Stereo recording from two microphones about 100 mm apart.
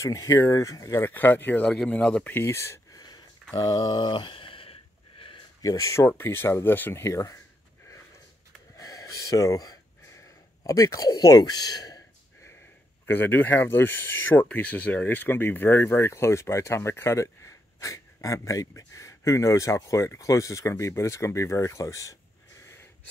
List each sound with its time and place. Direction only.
0.0 s speech: 30° left (ahead or behind); by 2.4 s 15° left (ahead or behind)
2.4 s speech: 30° left (ahead or behind)
3.5 s mantra: 40° left (ahead or behind); by 4.7 s 65° left (ahead or behind)
5.6 s speech: 35° left (ahead or behind)
8.7 s a sound: 35° left (ahead or behind)
10.6 s speech: 35° left (ahead or behind)
13.0 s speech: 20° left (ahead or behind)